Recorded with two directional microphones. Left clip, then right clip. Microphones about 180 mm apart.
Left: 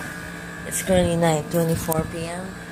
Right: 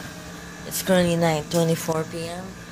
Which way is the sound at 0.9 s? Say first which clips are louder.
Left 1 dB; 50° right (ahead or behind).